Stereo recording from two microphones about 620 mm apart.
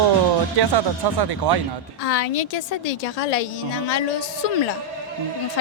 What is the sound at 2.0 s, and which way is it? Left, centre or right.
A woman's voice, left.